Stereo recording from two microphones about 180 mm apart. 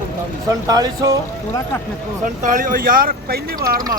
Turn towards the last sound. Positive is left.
turn(degrees=-60)  # may be behind; listen again after turning